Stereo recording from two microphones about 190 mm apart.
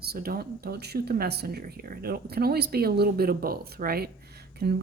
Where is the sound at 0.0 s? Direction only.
55° right (ahead or behind).